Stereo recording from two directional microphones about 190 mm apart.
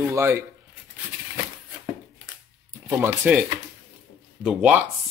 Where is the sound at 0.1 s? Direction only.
15° right (ahead or behind).